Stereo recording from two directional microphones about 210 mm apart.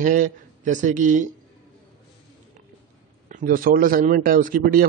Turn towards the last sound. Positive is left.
turn(degrees=-45)  # may be behind; listen again after turning